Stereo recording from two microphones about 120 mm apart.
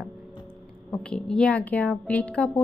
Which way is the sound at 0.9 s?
5° left (ahead or behind).